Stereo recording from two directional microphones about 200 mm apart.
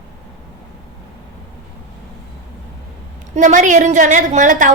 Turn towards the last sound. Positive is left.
turn(degrees=-40)  # may be behind; listen again after turning